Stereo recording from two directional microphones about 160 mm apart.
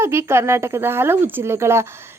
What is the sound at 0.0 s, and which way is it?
A woman's voice, 15° right (ahead or behind).